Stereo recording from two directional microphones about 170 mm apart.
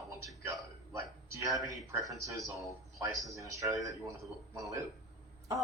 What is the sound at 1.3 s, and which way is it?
A woman's voice, 20° right (ahead or behind).